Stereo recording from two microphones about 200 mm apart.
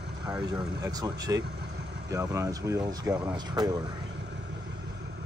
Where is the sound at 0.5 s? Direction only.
20° right (ahead or behind).